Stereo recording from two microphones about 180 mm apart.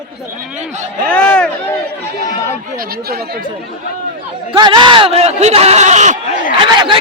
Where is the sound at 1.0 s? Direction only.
5° left (ahead or behind).